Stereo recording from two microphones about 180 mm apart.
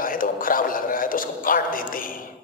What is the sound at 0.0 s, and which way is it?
A man's voice, 50° left (ahead or behind).